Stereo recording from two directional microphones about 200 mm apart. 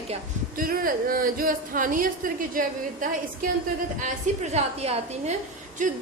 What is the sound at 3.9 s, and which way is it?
A woman's voice, 35° right (ahead or behind).